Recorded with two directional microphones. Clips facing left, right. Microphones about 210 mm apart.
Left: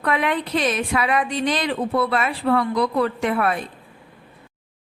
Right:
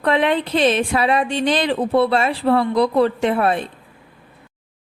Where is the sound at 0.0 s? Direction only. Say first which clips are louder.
Right 5 dB; 30° right (ahead or behind).